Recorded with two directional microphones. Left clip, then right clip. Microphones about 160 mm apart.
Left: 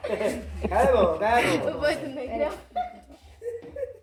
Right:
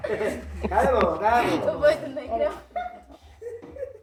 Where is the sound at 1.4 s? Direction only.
20° left (ahead or behind).